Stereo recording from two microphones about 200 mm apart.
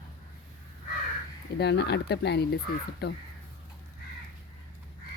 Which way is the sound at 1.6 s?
55° left (ahead or behind).